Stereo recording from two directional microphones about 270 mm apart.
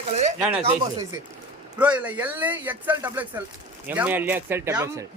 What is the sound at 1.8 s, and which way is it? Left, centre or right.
Speech, centre.